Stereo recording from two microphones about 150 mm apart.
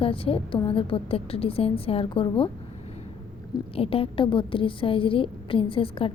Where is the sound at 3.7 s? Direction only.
40° left (ahead or behind).